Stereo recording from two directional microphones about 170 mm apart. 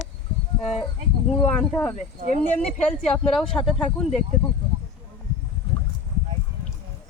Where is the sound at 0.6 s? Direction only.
Centre (ahead or behind).